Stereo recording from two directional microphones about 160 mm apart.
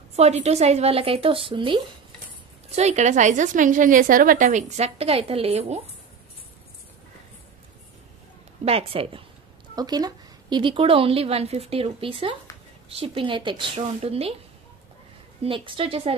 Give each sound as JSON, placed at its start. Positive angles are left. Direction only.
{"t": 0.1, "sound": "a woman's voice", "side_deg": -40}
{"t": 2.7, "sound": "a woman's voice", "side_deg": -45}
{"t": 8.6, "sound": "a woman's voice", "side_deg": -40}
{"t": 9.8, "sound": "a woman's voice", "side_deg": -25}
{"t": 15.4, "sound": "a woman's voice", "side_deg": -30}